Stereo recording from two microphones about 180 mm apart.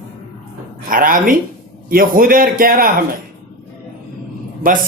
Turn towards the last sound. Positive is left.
turn(degrees=-50)  # may be behind; listen again after turning